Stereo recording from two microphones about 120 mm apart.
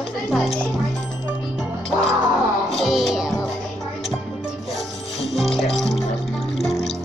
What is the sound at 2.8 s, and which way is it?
Music, centre (ahead or behind).